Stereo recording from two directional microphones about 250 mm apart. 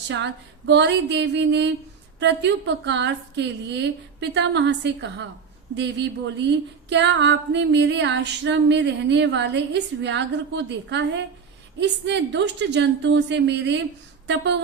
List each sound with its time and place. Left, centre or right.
0.1 s female singing: right